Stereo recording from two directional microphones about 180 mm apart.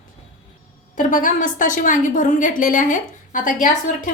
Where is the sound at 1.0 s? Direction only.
45° left (ahead or behind).